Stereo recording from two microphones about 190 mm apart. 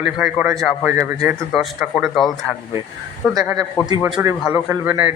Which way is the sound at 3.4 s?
20° right (ahead or behind).